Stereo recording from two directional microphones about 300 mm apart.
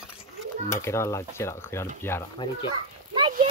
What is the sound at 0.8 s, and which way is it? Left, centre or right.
Speech, centre.